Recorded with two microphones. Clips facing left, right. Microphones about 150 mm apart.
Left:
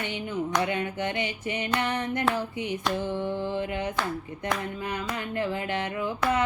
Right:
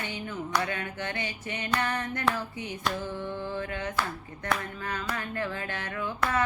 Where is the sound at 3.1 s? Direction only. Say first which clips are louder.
Left 5 dB; 20° left (ahead or behind).